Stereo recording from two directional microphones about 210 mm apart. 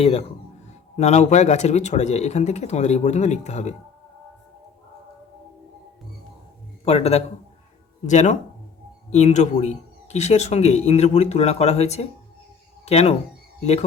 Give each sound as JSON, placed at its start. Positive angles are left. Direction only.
{"t": 0.0, "sound": "speech", "side_deg": 30}
{"t": 6.8, "sound": "speech", "side_deg": 30}